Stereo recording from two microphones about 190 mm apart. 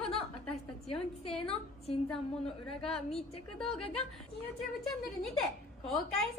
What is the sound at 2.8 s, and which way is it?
Speech, 5° left (ahead or behind).